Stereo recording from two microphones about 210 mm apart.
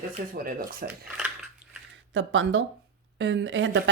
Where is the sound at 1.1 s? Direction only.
5° right (ahead or behind).